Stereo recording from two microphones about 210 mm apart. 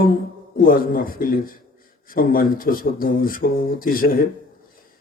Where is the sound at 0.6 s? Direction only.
40° left (ahead or behind).